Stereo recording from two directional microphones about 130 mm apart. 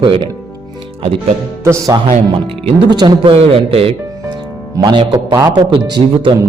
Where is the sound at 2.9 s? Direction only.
35° right (ahead or behind).